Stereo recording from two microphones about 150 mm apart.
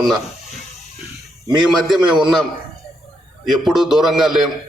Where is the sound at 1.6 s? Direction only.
Centre (ahead or behind).